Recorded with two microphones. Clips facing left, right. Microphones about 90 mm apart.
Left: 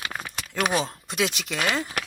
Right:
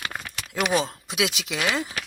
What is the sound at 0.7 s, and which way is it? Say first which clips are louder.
Speech: right 1 dB; centre (ahead or behind).